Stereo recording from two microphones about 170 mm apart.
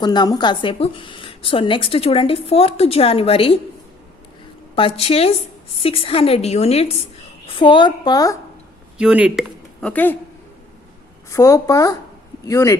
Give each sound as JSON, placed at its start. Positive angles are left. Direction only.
{"t": 0.0, "sound": "a woman's voice", "side_deg": 25}
{"t": 4.7, "sound": "a woman's voice", "side_deg": 35}
{"t": 9.0, "sound": "speech", "side_deg": -5}
{"t": 9.9, "sound": "speech", "side_deg": 10}
{"t": 11.3, "sound": "speech", "side_deg": 20}